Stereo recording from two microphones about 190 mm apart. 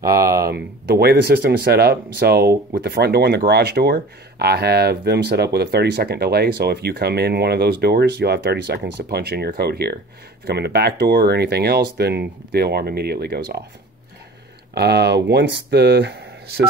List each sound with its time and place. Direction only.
0.0 s speech: 15° right (ahead or behind)
0.5 s speech: 55° right (ahead or behind)
14.7 s speech: 60° right (ahead or behind)